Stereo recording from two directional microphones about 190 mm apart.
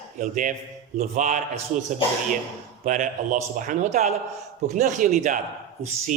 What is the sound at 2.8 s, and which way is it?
Speech, 40° right (ahead or behind).